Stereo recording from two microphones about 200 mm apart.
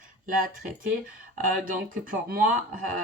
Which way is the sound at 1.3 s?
45° right (ahead or behind).